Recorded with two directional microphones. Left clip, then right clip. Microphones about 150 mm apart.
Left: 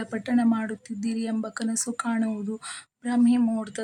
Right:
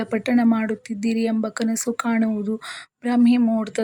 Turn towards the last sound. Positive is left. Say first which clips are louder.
# right 5 dB
turn(degrees=-20)  # may be behind; listen again after turning